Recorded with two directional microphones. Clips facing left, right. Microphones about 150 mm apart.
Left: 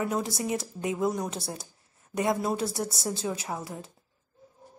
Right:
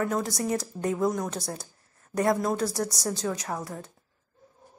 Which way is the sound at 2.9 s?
5° left (ahead or behind).